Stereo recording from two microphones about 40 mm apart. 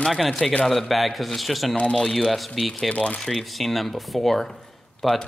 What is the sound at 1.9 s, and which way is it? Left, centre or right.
Speech, centre.